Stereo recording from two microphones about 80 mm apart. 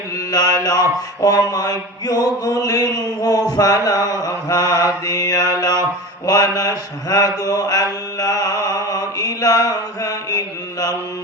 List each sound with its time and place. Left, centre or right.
0.3 s mantra: left